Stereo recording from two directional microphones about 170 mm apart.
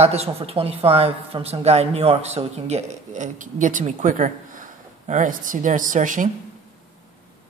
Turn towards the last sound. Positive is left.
turn(degrees=-50)  # may be behind; listen again after turning